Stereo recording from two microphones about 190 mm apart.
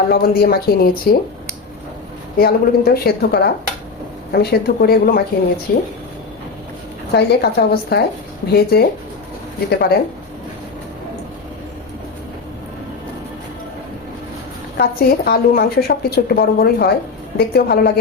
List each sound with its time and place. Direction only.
0.1 s a woman's voice: 55° left (ahead or behind)
2.4 s a woman's voice: 55° left (ahead or behind)
7.1 s a woman's voice: 60° left (ahead or behind)
14.8 s a woman's voice: 55° left (ahead or behind)